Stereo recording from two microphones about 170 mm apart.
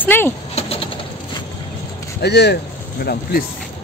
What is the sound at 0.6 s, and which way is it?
Pigeon, 35° left (ahead or behind).